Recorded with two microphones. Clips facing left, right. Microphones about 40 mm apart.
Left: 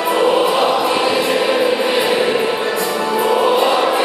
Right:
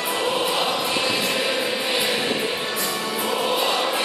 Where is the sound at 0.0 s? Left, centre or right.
Centre.